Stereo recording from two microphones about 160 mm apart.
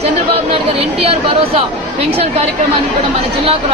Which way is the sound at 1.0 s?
40° right (ahead or behind).